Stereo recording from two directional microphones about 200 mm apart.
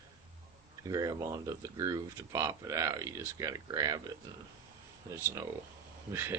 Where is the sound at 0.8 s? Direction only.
20° right (ahead or behind).